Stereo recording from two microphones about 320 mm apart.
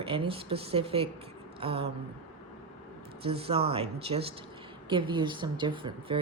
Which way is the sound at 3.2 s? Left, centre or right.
Centre.